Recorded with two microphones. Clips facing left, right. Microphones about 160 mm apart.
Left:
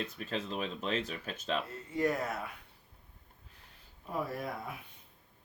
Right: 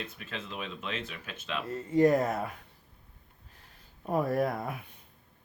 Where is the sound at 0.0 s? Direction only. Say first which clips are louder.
Left 3 dB; 40° left (ahead or behind).